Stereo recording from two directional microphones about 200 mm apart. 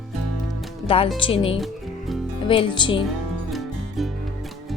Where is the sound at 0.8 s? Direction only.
30° left (ahead or behind).